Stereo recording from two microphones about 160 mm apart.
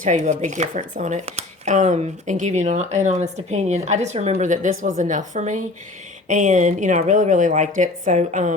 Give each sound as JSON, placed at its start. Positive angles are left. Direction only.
{"t": 0.0, "sound": "speech", "side_deg": -50}